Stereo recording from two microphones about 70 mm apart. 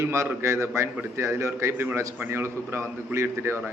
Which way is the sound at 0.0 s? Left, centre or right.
Right.